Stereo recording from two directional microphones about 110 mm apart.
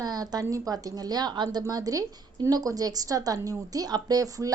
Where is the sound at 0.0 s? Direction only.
35° right (ahead or behind).